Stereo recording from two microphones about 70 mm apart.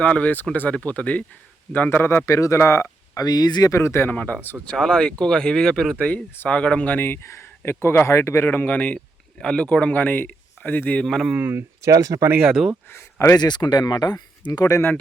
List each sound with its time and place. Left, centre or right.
0.0 s speech: centre
2.0 s speech: left
3.2 s speech: left
3.7 s speech: left
4.1 s speech: centre; by 8.4 s left
8.4 s speech: left
11.0 s speech: centre
11.3 s speech: right
11.8 s speech: right
12.5 s speech: centre
12.9 s speech: left
13.3 s speech: left